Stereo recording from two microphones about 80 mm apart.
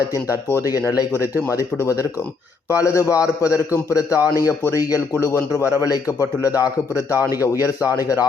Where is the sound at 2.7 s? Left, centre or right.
Left.